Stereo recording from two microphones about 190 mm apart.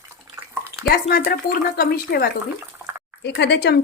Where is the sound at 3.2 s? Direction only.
65° left (ahead or behind).